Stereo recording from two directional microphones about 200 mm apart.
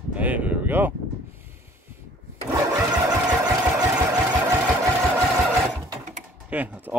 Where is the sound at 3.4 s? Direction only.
20° right (ahead or behind).